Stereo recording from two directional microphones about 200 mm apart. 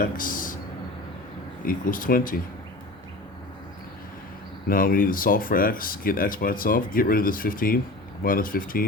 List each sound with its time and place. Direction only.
0.0 s a sound: 45° left (ahead or behind)
1.6 s speech: 45° left (ahead or behind)
4.7 s speech: 45° left (ahead or behind)